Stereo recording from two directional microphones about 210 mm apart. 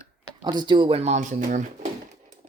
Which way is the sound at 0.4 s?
20° right (ahead or behind).